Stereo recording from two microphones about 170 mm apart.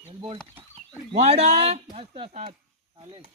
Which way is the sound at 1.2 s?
40° right (ahead or behind).